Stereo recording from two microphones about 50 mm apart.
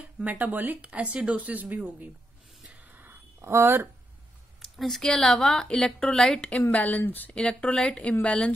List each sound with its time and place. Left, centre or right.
0.0 s a sound: right
0.4 s speech: right
2.8 s a sound: right
3.4 s speech: right
4.7 s a woman's voice: centre
6.7 s speech: left
7.3 s speech: left